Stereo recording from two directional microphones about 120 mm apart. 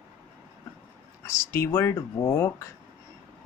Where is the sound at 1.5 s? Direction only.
25° left (ahead or behind).